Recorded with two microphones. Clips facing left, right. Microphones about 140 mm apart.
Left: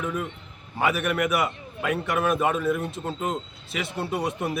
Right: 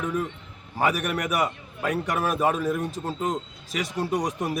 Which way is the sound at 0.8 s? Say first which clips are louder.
Left 1 dB; 40° right (ahead or behind).